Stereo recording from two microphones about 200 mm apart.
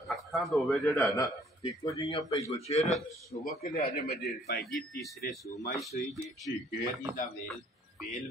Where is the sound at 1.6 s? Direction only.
20° left (ahead or behind).